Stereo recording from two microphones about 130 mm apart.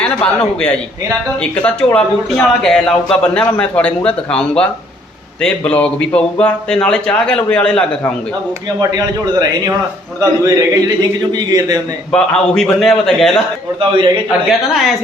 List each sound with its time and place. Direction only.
0.0 s speech: 10° left (ahead or behind)
8.8 s a man's voice: 30° right (ahead or behind)
12.1 s a man's voice: 5° left (ahead or behind)
13.7 s a man's voice: 40° right (ahead or behind)
14.7 s a man's voice: centre (ahead or behind)